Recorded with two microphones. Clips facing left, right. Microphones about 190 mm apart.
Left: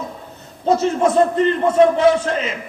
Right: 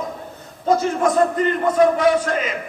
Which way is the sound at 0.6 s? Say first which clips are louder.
Left 2 dB; 25° left (ahead or behind).